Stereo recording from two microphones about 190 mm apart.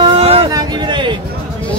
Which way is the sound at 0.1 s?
30° right (ahead or behind).